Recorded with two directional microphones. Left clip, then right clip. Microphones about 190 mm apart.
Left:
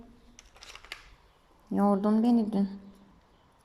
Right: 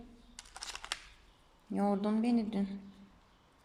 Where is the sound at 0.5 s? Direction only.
40° right (ahead or behind).